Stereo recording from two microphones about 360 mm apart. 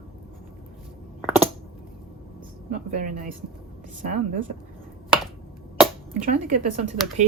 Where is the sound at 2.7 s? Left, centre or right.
Right.